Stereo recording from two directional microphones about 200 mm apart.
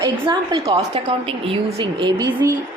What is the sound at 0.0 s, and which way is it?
A woman's voice, 20° right (ahead or behind).